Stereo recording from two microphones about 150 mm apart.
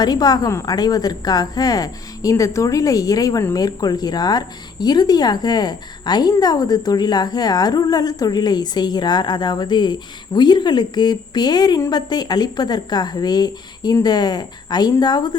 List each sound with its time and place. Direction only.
0.0 s a woman's voice: 25° left (ahead or behind)